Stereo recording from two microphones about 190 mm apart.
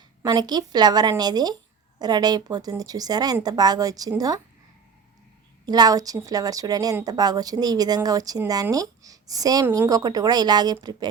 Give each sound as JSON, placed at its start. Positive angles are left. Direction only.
{"t": 0.2, "sound": "a woman's voice", "side_deg": -20}
{"t": 5.6, "sound": "a woman's voice", "side_deg": -20}